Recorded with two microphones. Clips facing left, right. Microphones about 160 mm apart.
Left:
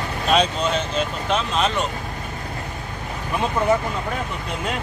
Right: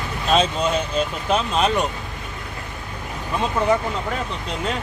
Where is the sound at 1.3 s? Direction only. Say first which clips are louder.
Right 2 dB; 5° right (ahead or behind).